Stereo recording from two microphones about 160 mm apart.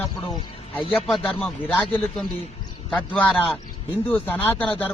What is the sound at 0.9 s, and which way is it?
Speech, 5° left (ahead or behind).